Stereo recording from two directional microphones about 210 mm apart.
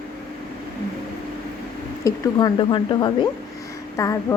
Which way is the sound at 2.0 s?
20° left (ahead or behind).